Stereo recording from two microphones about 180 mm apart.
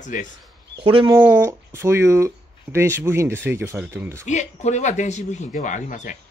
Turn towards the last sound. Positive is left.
turn(degrees=45)  # may be behind; listen again after turning